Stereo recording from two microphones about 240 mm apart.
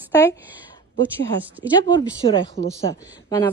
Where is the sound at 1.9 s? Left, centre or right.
Left.